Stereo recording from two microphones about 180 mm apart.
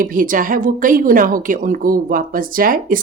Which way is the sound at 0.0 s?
50° right (ahead or behind).